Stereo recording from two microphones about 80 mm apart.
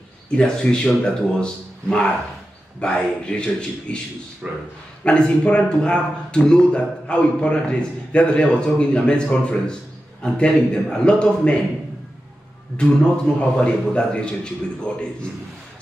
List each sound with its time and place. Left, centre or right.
0.4 s a man's voice: centre
4.4 s speech: centre
5.0 s a man's voice: centre
12.7 s a man's voice: centre